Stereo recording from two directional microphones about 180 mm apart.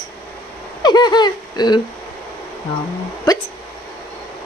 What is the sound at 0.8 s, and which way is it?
Speech, 25° left (ahead or behind).